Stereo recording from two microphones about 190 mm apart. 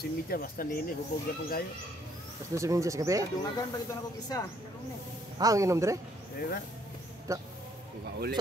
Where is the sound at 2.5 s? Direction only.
15° right (ahead or behind).